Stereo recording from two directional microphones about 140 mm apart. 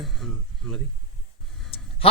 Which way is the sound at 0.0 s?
Centre (ahead or behind).